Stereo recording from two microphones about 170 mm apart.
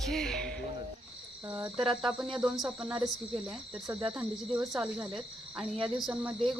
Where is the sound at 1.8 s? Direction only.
5° right (ahead or behind).